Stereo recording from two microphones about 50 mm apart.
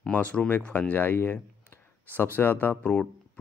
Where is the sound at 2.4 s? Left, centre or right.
Left.